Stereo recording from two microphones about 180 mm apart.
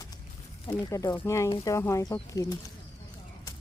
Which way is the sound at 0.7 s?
20° left (ahead or behind).